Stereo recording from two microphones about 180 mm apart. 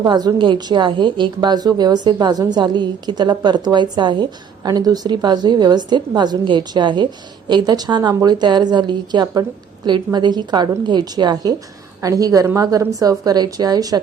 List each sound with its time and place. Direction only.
0.0 s a woman's voice: 20° right (ahead or behind)